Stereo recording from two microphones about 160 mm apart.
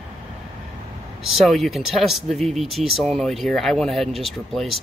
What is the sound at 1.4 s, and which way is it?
Speech, centre (ahead or behind).